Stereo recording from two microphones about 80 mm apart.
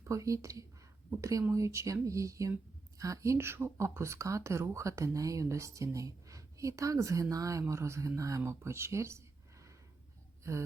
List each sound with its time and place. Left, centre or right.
0.0 s speech: right